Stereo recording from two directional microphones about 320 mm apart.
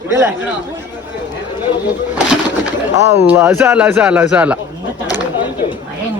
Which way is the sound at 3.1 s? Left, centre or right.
Centre.